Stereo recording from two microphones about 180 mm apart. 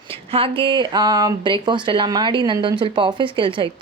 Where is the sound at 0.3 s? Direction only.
30° right (ahead or behind).